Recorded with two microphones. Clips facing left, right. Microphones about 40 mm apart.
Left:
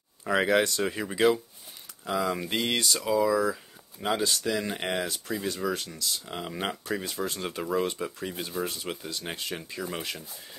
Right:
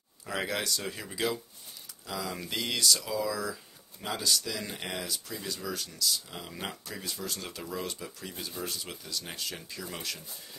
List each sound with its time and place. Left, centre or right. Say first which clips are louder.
0.2 s speech: left 9 dB; left